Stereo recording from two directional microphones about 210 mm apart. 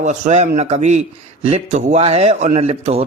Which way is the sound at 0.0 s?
35° right (ahead or behind).